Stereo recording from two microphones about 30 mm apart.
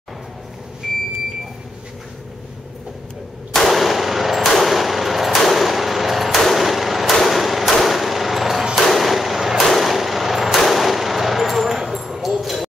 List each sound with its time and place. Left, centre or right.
0.8 s vehicle: centre
3.5 s gunshot: centre
4.4 s a sound: centre
5.4 s gunshot: centre
6.3 s a sound: centre
6.6 s hammer: centre
7.1 s vehicle: centre
7.8 s gunshot: centre
12.3 s a sound: centre